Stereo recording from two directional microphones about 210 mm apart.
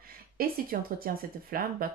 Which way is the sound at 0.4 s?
45° right (ahead or behind).